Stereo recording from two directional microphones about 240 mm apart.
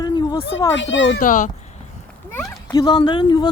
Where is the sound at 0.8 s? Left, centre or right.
Left.